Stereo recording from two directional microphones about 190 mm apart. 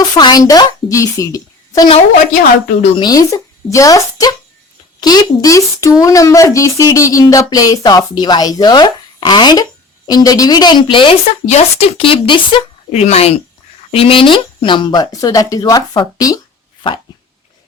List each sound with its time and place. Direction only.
0.2 s speech: 20° left (ahead or behind)